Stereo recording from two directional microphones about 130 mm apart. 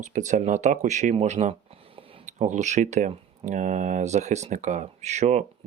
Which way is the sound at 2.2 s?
65° right (ahead or behind).